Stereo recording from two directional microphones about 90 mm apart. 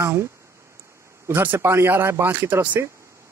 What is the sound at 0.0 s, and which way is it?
Speech, 30° right (ahead or behind).